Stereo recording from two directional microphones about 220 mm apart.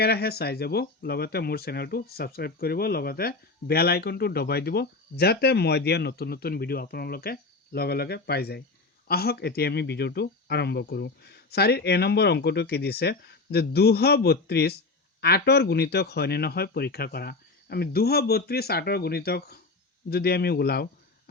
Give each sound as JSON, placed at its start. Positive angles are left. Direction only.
{"t": 0.0, "sound": "speech", "side_deg": 45}